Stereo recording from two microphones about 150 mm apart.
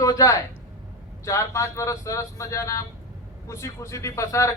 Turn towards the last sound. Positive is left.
turn(degrees=20)  # may be behind; listen again after turning